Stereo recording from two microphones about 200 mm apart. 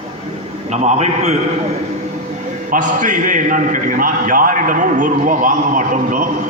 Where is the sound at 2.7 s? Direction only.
40° right (ahead or behind).